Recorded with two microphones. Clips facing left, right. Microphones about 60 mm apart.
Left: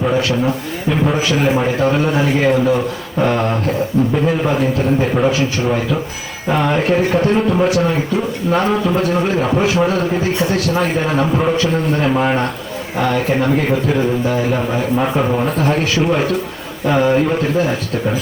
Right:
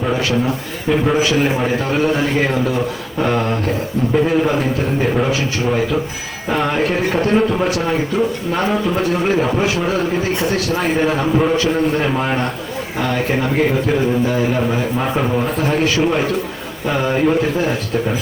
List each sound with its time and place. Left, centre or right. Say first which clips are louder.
10.8 s a man's voice: even; centre